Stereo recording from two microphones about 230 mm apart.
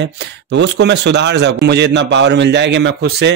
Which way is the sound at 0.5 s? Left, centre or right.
Right.